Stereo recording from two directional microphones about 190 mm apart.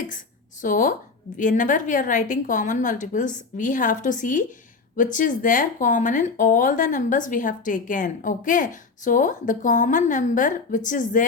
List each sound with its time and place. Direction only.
0.6 s speech: 45° left (ahead or behind)